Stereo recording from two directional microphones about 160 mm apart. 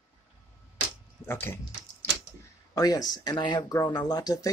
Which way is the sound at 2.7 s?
25° left (ahead or behind).